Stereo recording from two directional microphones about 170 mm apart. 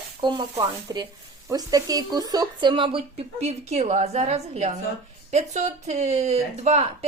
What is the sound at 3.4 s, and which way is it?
Speech, 40° right (ahead or behind).